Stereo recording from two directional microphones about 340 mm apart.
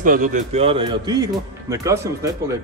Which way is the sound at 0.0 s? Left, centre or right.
Right.